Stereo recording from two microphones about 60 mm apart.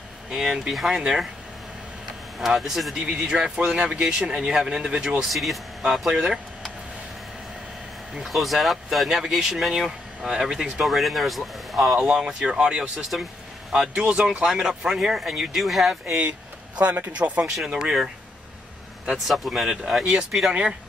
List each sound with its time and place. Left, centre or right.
0.3 s speech: centre
2.4 s speech: centre
5.3 s speech: centre
5.9 s speech: centre
8.2 s speech: centre
12.0 s speech: centre
16.7 s speech: right
17.6 s speech: centre